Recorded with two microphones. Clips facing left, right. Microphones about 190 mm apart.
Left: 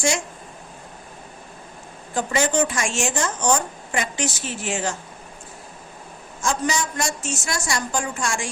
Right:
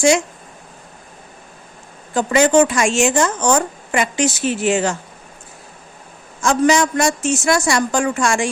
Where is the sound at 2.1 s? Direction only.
90° right.